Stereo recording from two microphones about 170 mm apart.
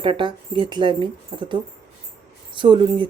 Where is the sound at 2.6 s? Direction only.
30° right (ahead or behind).